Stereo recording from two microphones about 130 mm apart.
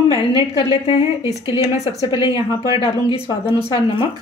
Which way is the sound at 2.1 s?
40° left (ahead or behind).